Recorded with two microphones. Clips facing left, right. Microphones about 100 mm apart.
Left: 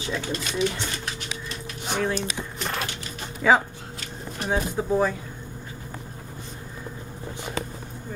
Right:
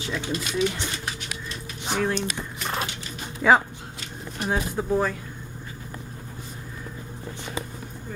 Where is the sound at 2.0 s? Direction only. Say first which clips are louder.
Right 1 dB; centre (ahead or behind).